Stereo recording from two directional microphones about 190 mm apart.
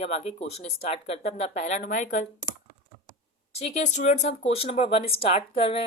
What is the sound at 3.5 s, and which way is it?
Speech, 35° left (ahead or behind).